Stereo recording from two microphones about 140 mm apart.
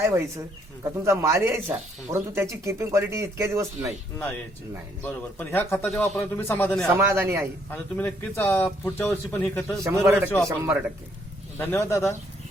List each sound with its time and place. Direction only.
0.0 s speech: 20° right (ahead or behind)
5.0 s speech: 15° left (ahead or behind)
6.8 s speech: 20° right (ahead or behind)
7.7 s speech: 15° left (ahead or behind)
10.0 s speech: 15° right (ahead or behind)
11.5 s speech: 15° left (ahead or behind)